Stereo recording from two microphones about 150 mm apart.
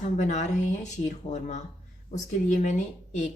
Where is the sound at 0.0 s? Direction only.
50° left (ahead or behind).